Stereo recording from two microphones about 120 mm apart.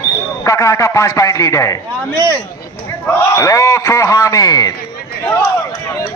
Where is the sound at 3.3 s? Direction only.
25° left (ahead or behind).